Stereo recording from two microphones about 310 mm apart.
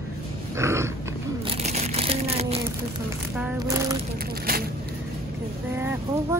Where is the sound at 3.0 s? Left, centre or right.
Centre.